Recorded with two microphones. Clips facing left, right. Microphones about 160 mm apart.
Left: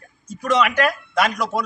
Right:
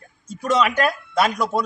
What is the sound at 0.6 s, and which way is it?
Speech, 25° right (ahead or behind).